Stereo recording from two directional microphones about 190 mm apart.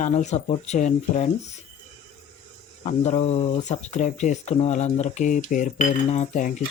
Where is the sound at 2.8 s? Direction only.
35° left (ahead or behind).